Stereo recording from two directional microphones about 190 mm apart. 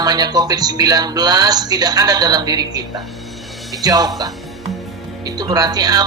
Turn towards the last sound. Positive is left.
turn(degrees=-20)  # may be behind; listen again after turning